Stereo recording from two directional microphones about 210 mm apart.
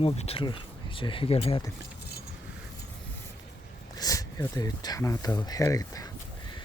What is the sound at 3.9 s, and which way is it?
Speech, 15° left (ahead or behind).